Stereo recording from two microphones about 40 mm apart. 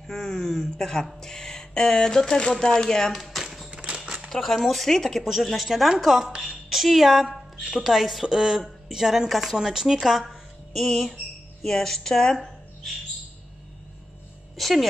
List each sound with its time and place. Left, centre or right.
0.0 s speech: centre
3.1 s a sound: centre
3.7 s horse: right
4.3 s a woman's voice: centre
10.7 s speech: centre
14.6 s speech: centre